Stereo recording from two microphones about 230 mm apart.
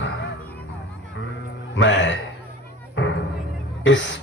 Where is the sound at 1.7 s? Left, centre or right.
Left.